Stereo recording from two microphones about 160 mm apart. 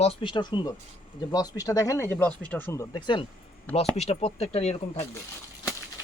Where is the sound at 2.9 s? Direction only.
30° left (ahead or behind).